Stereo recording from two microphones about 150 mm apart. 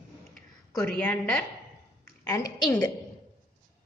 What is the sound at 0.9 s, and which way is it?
Speech, 5° left (ahead or behind).